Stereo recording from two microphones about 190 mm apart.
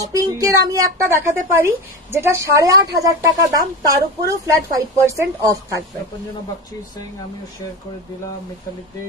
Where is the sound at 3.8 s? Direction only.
20° right (ahead or behind).